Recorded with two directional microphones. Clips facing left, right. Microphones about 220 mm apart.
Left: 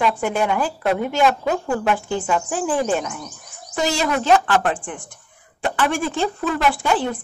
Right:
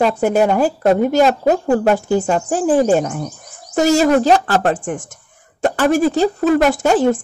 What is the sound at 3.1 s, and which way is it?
Speech, 50° right (ahead or behind).